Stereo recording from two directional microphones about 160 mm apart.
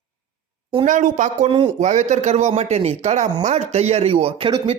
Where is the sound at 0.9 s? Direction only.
55° right (ahead or behind).